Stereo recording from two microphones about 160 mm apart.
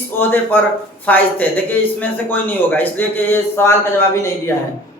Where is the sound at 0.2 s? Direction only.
10° left (ahead or behind).